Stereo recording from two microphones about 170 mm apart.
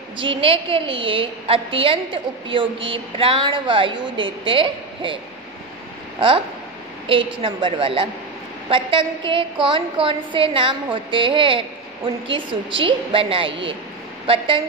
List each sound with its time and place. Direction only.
0.2 s a woman's voice: 30° right (ahead or behind)